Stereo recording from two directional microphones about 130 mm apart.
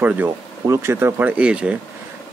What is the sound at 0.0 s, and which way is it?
A man's voice, 15° right (ahead or behind).